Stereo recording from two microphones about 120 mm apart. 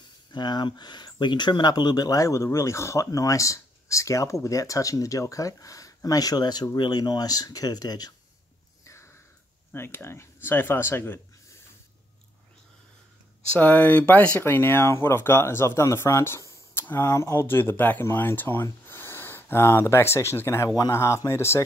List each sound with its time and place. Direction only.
0.3 s speech: 40° left (ahead or behind)
8.8 s a sound: 25° left (ahead or behind)
9.7 s speech: 20° left (ahead or behind)
13.5 s speech: 15° left (ahead or behind)